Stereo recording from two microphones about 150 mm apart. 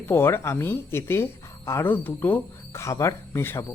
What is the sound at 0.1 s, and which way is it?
Speech, 15° left (ahead or behind).